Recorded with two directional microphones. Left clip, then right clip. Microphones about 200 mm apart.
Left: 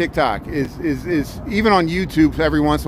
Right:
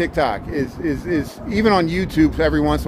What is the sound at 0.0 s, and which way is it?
Speech, 35° left (ahead or behind).